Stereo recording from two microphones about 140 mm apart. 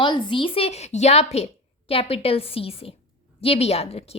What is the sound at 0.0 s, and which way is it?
A woman's voice, 35° left (ahead or behind).